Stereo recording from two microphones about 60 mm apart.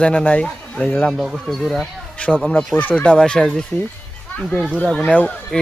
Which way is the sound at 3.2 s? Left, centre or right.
Centre.